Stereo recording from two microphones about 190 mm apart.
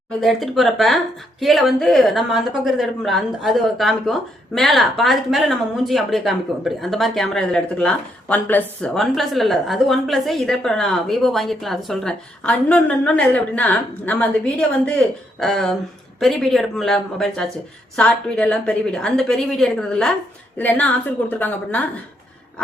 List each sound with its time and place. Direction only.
0.2 s a woman's voice: centre (ahead or behind)